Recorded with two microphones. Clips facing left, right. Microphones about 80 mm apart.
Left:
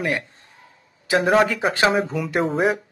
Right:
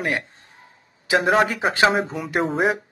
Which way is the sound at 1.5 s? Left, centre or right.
Right.